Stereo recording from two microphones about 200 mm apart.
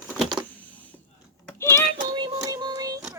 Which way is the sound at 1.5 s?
15° left (ahead or behind).